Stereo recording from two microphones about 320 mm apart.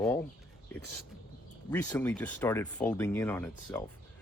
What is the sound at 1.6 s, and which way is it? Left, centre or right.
Speech, centre.